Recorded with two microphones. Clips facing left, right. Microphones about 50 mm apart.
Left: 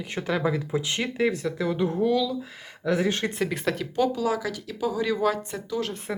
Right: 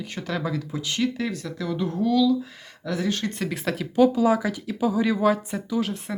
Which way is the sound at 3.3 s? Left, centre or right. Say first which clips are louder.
Left 1 dB; centre.